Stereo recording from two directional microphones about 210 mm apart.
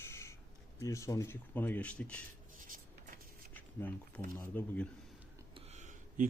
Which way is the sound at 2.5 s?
40° right (ahead or behind).